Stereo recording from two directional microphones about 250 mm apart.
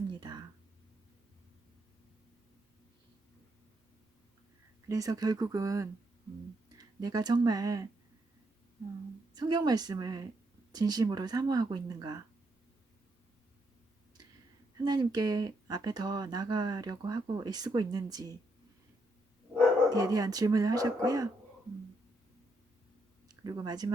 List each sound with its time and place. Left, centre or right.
0.1 s whispering: centre
4.9 s speech: centre
9.3 s speech: centre
14.8 s speech: centre
19.9 s speech: centre
23.3 s speech: centre